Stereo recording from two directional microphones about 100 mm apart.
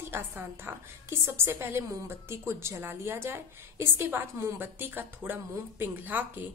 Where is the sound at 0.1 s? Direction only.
20° right (ahead or behind).